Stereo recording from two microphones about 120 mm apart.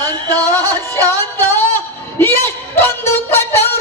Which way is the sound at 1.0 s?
20° left (ahead or behind).